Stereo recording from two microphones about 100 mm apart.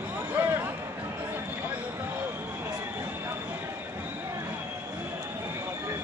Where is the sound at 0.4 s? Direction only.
20° right (ahead or behind).